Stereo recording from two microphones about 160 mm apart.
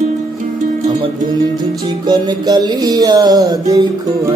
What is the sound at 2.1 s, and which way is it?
A man's voice, 25° right (ahead or behind).